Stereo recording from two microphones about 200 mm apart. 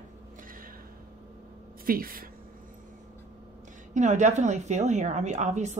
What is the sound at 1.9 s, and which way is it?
Speech, 45° right (ahead or behind).